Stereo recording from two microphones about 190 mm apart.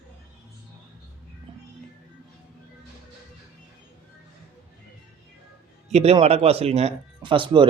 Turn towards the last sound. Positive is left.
turn(degrees=-25)  # may be behind; listen again after turning